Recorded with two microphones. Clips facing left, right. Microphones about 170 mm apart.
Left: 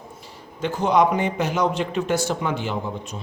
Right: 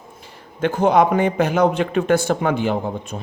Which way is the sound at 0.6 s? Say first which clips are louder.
Right 3 dB; 55° right (ahead or behind).